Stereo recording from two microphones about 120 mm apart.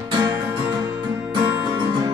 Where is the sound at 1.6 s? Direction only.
40° right (ahead or behind).